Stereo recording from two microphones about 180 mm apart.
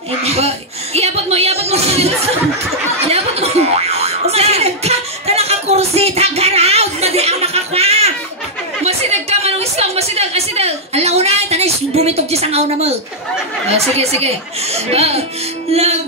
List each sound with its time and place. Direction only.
0.2 s speech: 35° right (ahead or behind)
3.1 s a sound: 35° right (ahead or behind)
13.7 s speech: 35° right (ahead or behind)